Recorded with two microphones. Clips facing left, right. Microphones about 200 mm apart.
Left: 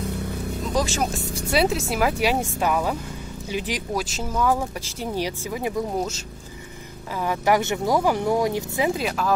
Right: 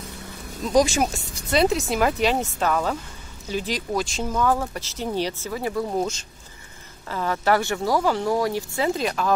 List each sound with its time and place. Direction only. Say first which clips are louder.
0.0 s vehicle: left 9 dB; 60° left (ahead or behind)
0.7 s speech: right 6 dB; 10° right (ahead or behind)
1.5 s speech: right 2 dB; 5° left (ahead or behind)
5.9 s speech: right 1 dB; 5° left (ahead or behind)
9.0 s speech: right 1 dB; centre (ahead or behind)